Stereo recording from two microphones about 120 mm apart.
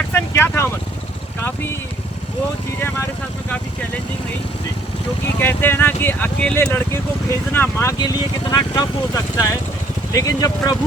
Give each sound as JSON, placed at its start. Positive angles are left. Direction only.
{"t": 0.1, "sound": "vehicle", "side_deg": 20}
{"t": 5.4, "sound": "speech", "side_deg": 20}
{"t": 7.9, "sound": "speech", "side_deg": 35}